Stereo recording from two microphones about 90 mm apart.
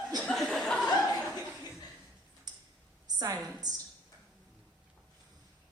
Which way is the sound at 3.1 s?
45° right (ahead or behind).